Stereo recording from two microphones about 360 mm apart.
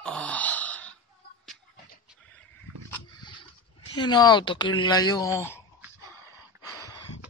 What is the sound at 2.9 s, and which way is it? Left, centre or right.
Pig, centre.